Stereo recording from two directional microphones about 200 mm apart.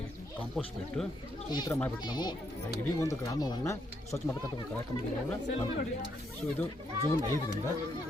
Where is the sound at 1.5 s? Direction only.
20° left (ahead or behind).